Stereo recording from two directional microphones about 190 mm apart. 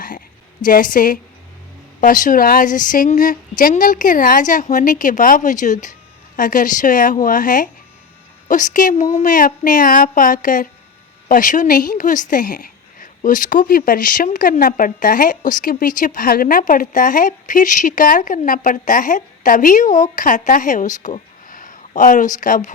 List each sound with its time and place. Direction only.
0.6 s a woman's voice: 45° left (ahead or behind)